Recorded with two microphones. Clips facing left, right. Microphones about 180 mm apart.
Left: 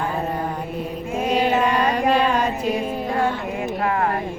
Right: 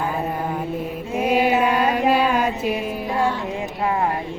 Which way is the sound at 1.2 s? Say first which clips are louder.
Right 1 dB; 5° right (ahead or behind).